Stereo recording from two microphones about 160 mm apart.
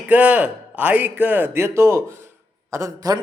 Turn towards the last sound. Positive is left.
turn(degrees=-20)  # may be behind; listen again after turning